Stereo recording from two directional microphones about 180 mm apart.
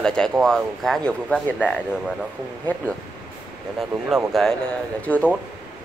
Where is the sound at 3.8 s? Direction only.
Centre (ahead or behind).